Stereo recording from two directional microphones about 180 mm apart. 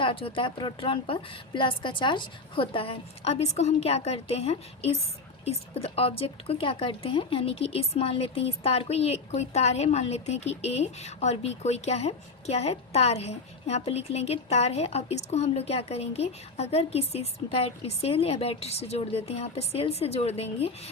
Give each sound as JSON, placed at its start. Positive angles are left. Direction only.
{"t": 0.0, "sound": "speech", "side_deg": 30}